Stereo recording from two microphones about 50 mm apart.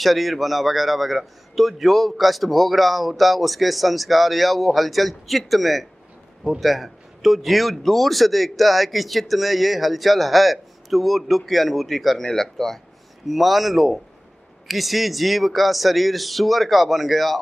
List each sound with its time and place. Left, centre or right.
0.0 s speech: centre